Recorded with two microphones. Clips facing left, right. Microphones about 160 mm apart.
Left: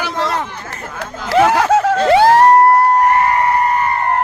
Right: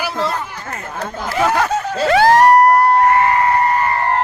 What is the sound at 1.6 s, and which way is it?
Snicker, 90° left.